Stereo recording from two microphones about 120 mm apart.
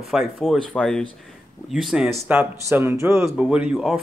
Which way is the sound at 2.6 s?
20° right (ahead or behind).